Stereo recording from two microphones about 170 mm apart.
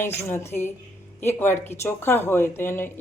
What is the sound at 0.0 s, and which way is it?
A woman's voice, 15° left (ahead or behind).